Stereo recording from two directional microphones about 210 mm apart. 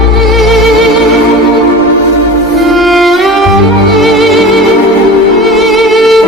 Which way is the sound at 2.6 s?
Centre (ahead or behind).